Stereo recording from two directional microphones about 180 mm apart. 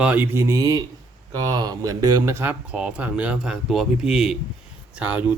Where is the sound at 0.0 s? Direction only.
10° right (ahead or behind).